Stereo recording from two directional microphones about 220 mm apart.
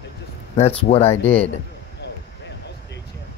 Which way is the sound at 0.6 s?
30° left (ahead or behind).